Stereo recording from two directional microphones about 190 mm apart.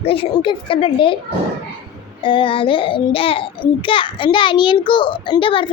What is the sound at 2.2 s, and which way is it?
A child's voice, 25° left (ahead or behind).